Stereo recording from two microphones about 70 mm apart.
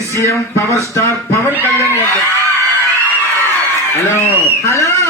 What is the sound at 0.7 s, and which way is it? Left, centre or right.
Speech, left.